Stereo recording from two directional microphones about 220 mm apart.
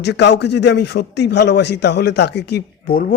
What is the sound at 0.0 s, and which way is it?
Speech, 50° left (ahead or behind).